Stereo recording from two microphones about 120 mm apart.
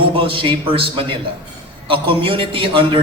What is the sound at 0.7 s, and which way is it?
A woman's voice, 45° right (ahead or behind).